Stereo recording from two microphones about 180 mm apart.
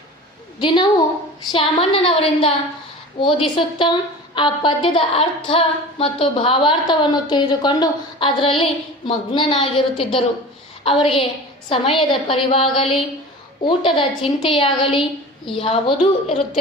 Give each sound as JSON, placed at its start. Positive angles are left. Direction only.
{"t": 0.6, "sound": "a woman's voice", "side_deg": 25}